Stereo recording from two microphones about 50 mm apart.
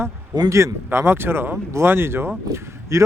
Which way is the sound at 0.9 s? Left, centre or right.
Right.